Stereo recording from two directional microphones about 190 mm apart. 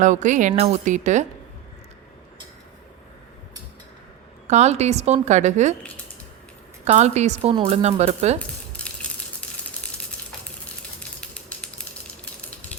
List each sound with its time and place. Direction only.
0.0 s speech: 40° right (ahead or behind)
4.4 s speech: 35° right (ahead or behind)
6.8 s speech: 35° right (ahead or behind)
8.4 s crumpling: 5° left (ahead or behind)
11.2 s typewriter: 5° left (ahead or behind)